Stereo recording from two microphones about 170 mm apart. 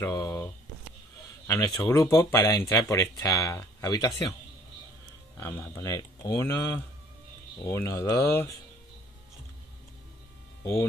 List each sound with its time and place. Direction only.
0.0 s speech: 15° left (ahead or behind)
1.5 s speech: 15° left (ahead or behind)
5.4 s speech: 15° left (ahead or behind)
10.6 s speech: 15° left (ahead or behind)